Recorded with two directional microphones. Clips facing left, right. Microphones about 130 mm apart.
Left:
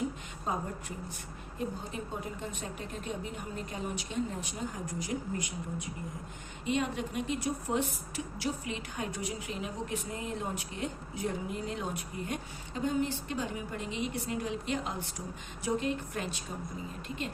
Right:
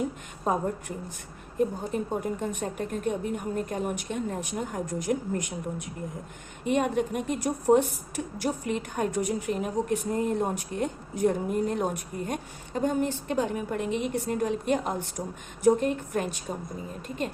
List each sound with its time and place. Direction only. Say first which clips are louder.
0.4 s a woman's voice: right 8 dB; 60° right (ahead or behind)
6.7 s a woman's voice: right 7 dB; 55° right (ahead or behind)